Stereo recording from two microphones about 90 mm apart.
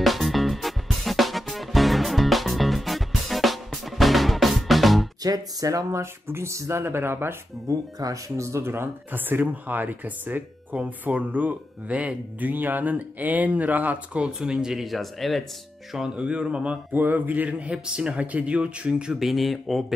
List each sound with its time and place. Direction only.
0.0 s music: centre (ahead or behind)
5.2 s speech: 45° right (ahead or behind); by 7.7 s 25° right (ahead or behind)
8.0 s speech: 35° right (ahead or behind); by 15.4 s centre (ahead or behind)
15.9 s speech: 10° right (ahead or behind)